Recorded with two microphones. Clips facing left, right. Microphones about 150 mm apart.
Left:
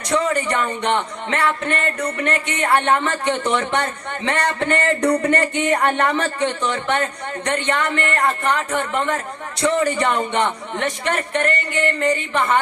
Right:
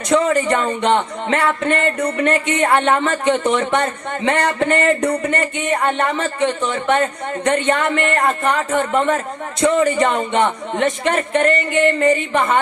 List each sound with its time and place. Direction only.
0.1 s speech: 25° right (ahead or behind)